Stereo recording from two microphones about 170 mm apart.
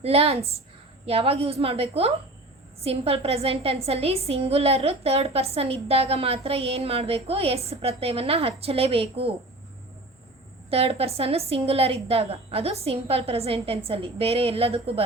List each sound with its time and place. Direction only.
0.0 s a woman's voice: 35° right (ahead or behind)
10.7 s a woman's voice: 35° right (ahead or behind)